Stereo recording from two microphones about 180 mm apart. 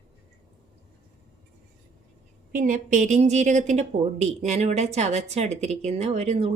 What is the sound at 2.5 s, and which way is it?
A woman's voice, 50° right (ahead or behind).